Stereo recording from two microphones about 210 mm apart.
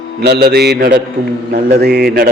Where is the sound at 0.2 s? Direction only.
50° right (ahead or behind).